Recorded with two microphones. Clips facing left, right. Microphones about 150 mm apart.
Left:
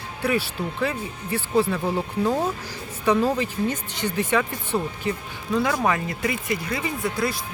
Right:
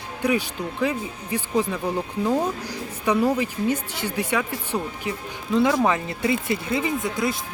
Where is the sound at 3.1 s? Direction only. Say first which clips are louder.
Even; 10° right (ahead or behind).